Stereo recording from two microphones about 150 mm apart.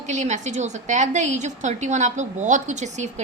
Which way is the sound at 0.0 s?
50° right (ahead or behind).